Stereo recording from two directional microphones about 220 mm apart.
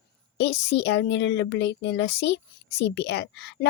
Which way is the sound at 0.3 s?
50° left (ahead or behind).